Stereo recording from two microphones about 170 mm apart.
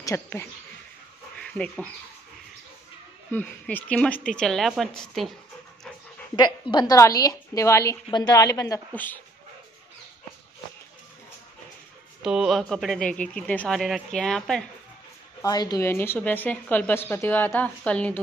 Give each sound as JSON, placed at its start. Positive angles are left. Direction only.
{"t": 0.0, "sound": "speech", "side_deg": 15}
{"t": 3.3, "sound": "speech", "side_deg": 10}
{"t": 6.3, "sound": "a woman's voice", "side_deg": 25}
{"t": 12.2, "sound": "speech", "side_deg": 0}
{"t": 15.4, "sound": "speech", "side_deg": 25}